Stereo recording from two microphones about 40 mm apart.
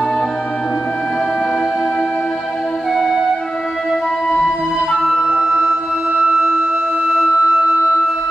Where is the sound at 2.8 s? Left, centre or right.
Centre.